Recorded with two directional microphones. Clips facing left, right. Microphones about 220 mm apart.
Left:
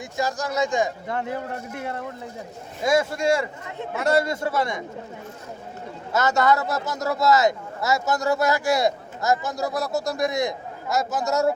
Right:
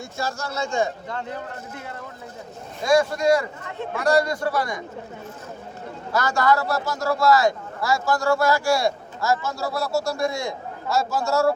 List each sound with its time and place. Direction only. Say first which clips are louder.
0.2 s speech: left 4 dB; 15° left (ahead or behind)
2.8 s a man's voice: right 2 dB; 25° left (ahead or behind)
6.1 s a man's voice: left 1 dB; 20° left (ahead or behind)